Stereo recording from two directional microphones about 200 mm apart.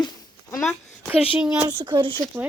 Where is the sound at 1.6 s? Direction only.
20° right (ahead or behind).